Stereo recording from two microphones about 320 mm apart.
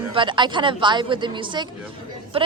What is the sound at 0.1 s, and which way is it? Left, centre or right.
Speech, centre.